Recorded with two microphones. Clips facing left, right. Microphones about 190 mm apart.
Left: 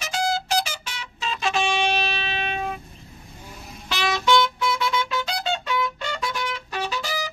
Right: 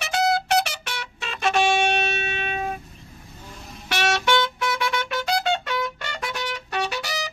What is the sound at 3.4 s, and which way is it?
Vehicle, 5° left (ahead or behind).